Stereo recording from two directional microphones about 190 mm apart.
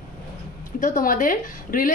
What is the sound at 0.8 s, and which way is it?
Speech, 45° left (ahead or behind).